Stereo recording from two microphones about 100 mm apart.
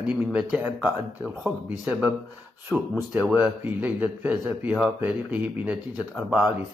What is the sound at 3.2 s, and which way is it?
A man's voice, 15° right (ahead or behind).